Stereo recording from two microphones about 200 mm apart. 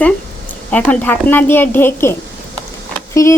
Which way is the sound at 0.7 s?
5° left (ahead or behind).